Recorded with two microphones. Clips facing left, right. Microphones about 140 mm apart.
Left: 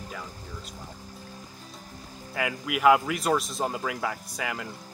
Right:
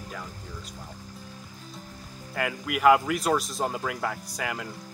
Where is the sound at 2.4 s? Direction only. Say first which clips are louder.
Even; centre (ahead or behind).